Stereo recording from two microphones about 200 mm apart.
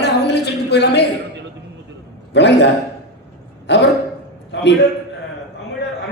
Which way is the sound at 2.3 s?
60° left (ahead or behind).